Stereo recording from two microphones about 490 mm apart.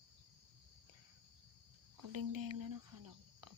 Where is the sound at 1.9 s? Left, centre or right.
Right.